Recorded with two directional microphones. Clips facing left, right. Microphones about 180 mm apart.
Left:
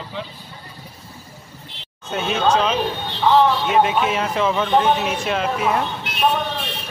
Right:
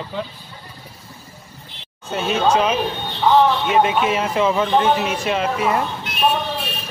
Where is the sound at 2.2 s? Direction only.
Centre (ahead or behind).